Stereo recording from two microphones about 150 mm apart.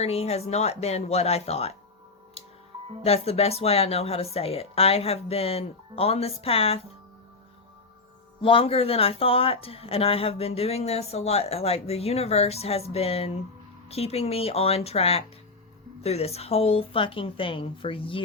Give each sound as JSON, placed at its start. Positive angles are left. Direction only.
{"t": 0.0, "sound": "speech", "side_deg": 45}
{"t": 3.0, "sound": "speech", "side_deg": 45}
{"t": 8.4, "sound": "speech", "side_deg": 35}